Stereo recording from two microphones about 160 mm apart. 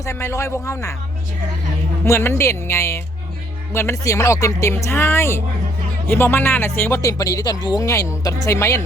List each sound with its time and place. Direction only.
0.0 s speech: 15° left (ahead or behind)
2.0 s speech: 15° left (ahead or behind)